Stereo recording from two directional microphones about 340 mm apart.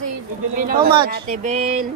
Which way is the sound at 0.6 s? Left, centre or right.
Right.